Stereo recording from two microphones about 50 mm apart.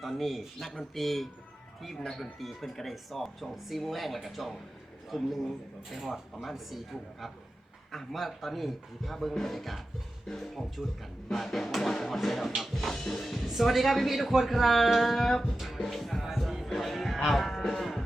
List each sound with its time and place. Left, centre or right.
0.0 s speech: centre
15.5 s music: centre